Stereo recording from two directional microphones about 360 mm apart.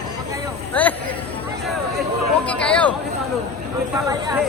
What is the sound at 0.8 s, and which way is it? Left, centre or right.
Speech, centre.